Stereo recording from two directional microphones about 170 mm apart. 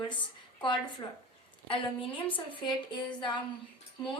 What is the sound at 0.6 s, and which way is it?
A woman's voice, 25° left (ahead or behind).